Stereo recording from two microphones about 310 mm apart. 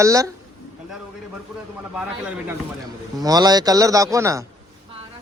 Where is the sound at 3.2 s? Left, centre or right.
Centre.